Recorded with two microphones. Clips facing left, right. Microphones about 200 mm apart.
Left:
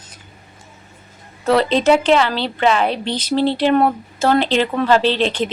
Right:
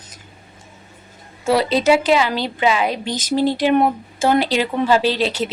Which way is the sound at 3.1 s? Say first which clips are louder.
Left 1 dB; 45° right (ahead or behind).